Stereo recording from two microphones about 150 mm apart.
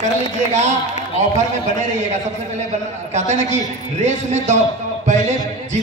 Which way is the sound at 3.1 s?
50° right (ahead or behind).